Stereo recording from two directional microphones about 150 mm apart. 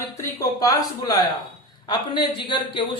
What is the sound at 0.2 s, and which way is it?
A man's voice, 25° left (ahead or behind).